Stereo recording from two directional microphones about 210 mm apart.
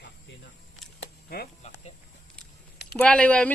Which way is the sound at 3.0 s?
5° left (ahead or behind).